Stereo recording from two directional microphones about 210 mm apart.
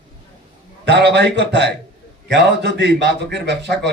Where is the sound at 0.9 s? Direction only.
55° right (ahead or behind).